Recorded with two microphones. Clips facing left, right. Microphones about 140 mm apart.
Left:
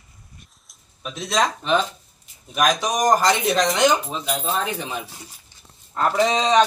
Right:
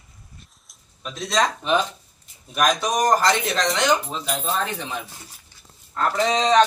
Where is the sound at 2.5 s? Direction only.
5° left (ahead or behind).